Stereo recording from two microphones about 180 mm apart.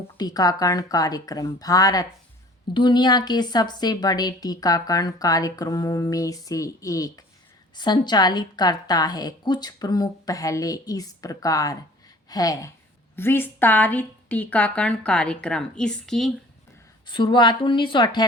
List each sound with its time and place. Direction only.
0.2 s a woman's voice: 20° left (ahead or behind); by 16.3 s 5° left (ahead or behind)
17.1 s a woman's voice: 25° left (ahead or behind)